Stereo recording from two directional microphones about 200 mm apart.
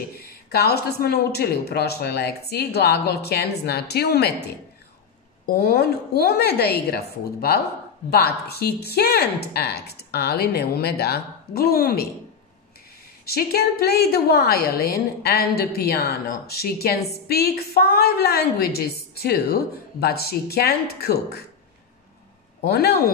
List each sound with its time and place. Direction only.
0.2 s a woman's voice: 55° left (ahead or behind)
13.2 s a woman's voice: 50° left (ahead or behind)
22.6 s a woman's voice: 50° left (ahead or behind)